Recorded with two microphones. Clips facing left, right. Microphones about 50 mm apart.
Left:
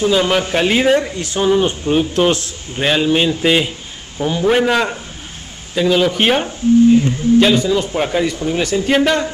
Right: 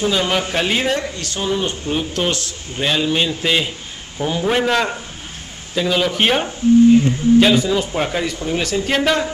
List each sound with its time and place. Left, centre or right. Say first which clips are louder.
0.0 s a man's voice: left 4 dB; centre